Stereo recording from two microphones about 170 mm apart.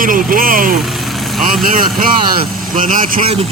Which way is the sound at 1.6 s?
55° right (ahead or behind).